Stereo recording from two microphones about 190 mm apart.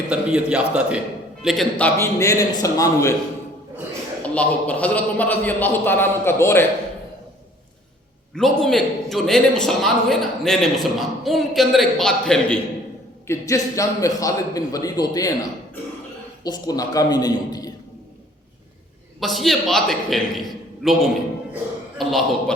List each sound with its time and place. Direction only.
0.1 s a man's voice: 5° right (ahead or behind)
1.8 s a man's voice: 15° left (ahead or behind)
4.2 s a man's voice: 5° left (ahead or behind)
8.4 s a man's voice: centre (ahead or behind)
13.2 s a man's voice: 15° left (ahead or behind)
16.4 s a man's voice: 20° left (ahead or behind)
19.2 s a man's voice: centre (ahead or behind)